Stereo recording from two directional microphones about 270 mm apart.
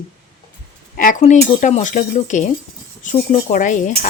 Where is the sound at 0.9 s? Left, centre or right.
Left.